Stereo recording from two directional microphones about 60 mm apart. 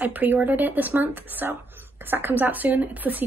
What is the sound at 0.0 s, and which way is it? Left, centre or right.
Speech, right.